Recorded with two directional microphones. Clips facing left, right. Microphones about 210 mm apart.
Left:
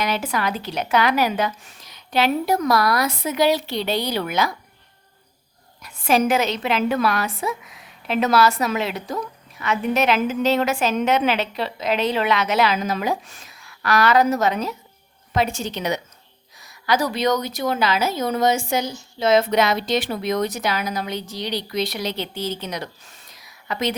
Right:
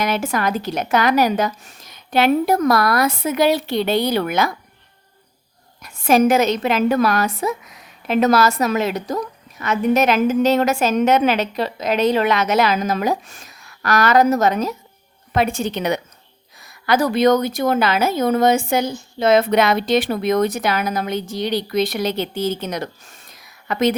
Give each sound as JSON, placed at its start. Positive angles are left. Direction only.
{"t": 0.0, "sound": "a woman's voice", "side_deg": -45}
{"t": 5.8, "sound": "a woman's voice", "side_deg": -45}
{"t": 15.3, "sound": "a woman's voice", "side_deg": -55}